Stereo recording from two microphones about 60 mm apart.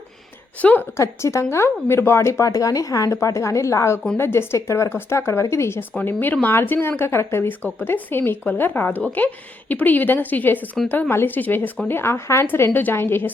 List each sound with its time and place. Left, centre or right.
0.8 s a woman's voice: left
3.2 s speech: left
4.2 s a woman's voice: left
6.1 s a woman's voice: left
11.1 s a woman's voice: left
11.3 s a woman's voice: left
11.9 s a woman's voice: left